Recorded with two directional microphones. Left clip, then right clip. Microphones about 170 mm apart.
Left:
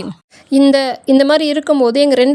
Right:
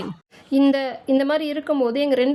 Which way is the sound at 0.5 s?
35° left (ahead or behind).